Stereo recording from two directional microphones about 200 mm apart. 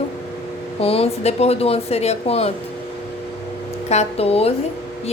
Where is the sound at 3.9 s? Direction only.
30° left (ahead or behind).